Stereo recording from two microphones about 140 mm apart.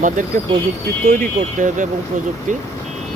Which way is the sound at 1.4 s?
65° right (ahead or behind).